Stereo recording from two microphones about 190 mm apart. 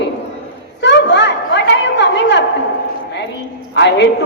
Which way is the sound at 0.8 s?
65° left (ahead or behind).